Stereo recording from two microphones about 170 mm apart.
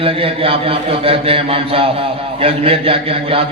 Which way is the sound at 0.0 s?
35° right (ahead or behind).